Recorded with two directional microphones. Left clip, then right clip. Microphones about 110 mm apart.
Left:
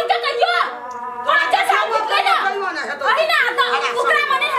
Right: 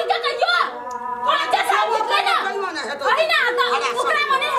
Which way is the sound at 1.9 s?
15° right (ahead or behind).